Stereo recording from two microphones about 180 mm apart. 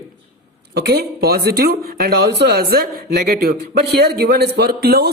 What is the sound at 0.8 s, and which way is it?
Speech, 65° right (ahead or behind).